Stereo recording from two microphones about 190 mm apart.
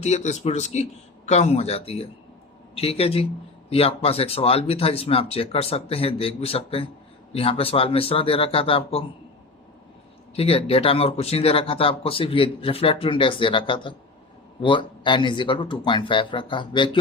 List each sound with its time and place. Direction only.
0.0 s speech: 35° left (ahead or behind)
10.3 s speech: 30° left (ahead or behind)